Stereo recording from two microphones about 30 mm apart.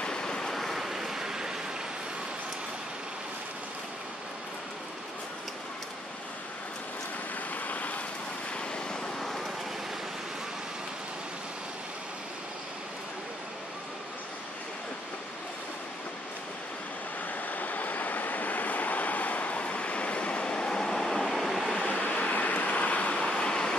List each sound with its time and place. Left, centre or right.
0.0 s waves: left
0.7 s vehicle: centre
7.5 s vehicle: left
8.5 s vehicle: left
9.2 s vehicle: centre
17.5 s waves: left; by 21.7 s centre
21.8 s a sound: left
23.3 s a sound: left